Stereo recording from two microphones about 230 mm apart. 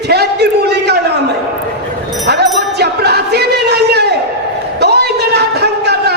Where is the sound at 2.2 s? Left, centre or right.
Right.